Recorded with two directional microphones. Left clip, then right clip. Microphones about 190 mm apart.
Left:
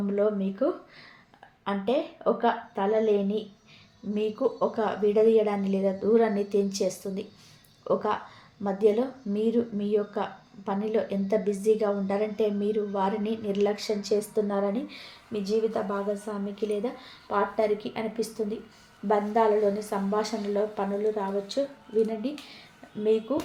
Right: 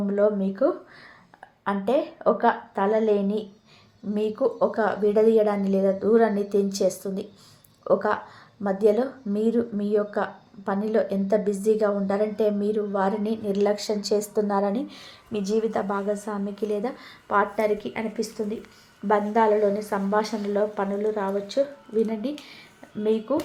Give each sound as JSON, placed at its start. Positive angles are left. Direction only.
{"t": 0.2, "sound": "a woman's voice", "side_deg": -15}